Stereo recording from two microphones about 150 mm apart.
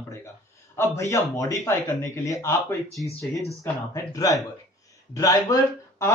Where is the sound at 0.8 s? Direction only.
20° left (ahead or behind).